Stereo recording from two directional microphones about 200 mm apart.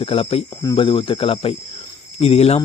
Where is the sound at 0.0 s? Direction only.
30° left (ahead or behind).